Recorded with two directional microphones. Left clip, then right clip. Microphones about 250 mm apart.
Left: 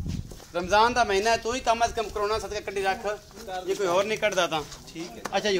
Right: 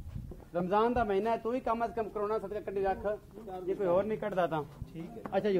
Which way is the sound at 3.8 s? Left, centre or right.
Centre.